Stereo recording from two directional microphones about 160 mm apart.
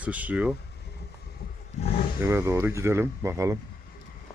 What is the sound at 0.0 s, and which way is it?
Speech, 10° right (ahead or behind).